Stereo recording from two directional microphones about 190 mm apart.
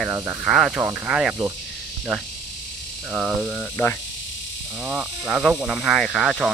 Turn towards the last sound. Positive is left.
turn(degrees=0)  # may be behind; listen again after turning